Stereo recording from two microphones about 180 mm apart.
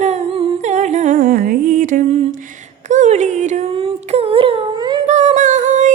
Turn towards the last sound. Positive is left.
turn(degrees=-40)  # may be behind; listen again after turning